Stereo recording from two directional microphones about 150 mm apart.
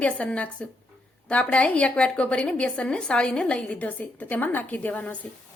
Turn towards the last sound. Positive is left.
turn(degrees=10)  # may be behind; listen again after turning